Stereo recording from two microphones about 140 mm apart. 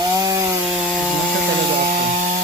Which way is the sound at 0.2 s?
25° right (ahead or behind).